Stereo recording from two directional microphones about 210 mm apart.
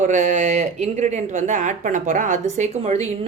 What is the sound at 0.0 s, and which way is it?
Speech, 35° right (ahead or behind).